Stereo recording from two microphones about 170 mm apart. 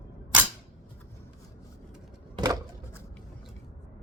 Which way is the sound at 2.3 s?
25° right (ahead or behind).